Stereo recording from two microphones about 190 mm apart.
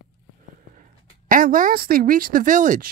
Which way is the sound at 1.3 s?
45° right (ahead or behind).